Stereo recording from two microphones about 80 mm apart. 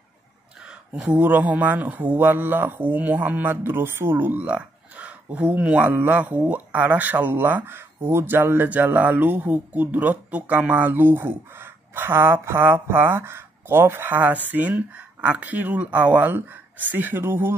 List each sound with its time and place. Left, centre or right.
0.7 s speech: centre; by 17.6 s right